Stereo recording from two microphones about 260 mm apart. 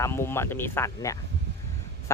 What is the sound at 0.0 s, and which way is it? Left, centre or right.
Speech, centre.